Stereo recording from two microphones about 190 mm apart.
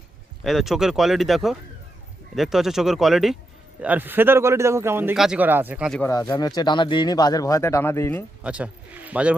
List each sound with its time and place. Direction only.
0.4 s speech: centre (ahead or behind)
6.1 s speech: 20° left (ahead or behind)
8.4 s speech: 5° right (ahead or behind)